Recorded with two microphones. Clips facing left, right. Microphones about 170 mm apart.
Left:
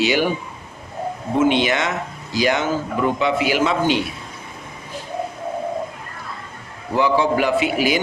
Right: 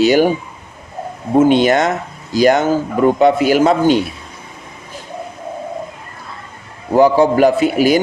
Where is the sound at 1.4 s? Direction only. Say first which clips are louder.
Right 7 dB; 45° right (ahead or behind).